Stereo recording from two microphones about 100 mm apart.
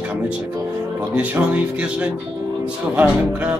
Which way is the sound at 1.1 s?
15° right (ahead or behind).